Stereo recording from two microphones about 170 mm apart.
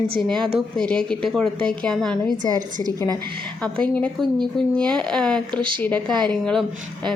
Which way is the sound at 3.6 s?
5° left (ahead or behind).